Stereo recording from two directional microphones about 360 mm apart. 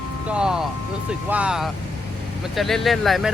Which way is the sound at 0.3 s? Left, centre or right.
Centre.